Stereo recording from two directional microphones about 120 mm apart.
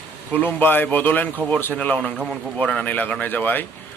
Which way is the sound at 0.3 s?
15° left (ahead or behind).